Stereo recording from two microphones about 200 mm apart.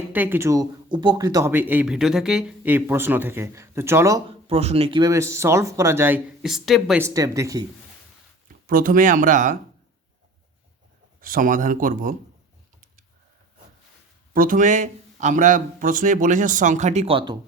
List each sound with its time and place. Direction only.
0.1 s speech: 10° right (ahead or behind)
4.4 s speech: 30° right (ahead or behind); by 7.0 s centre (ahead or behind)
7.0 s speech: 15° right (ahead or behind)
8.6 s speech: 45° right (ahead or behind)
11.2 s speech: 45° right (ahead or behind)
14.3 s speech: 45° right (ahead or behind); by 17.3 s 25° right (ahead or behind)